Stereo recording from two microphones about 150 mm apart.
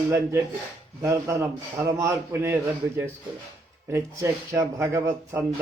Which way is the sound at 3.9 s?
20° right (ahead or behind).